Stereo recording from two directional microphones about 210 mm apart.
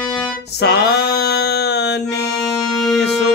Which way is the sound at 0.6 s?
50° left (ahead or behind).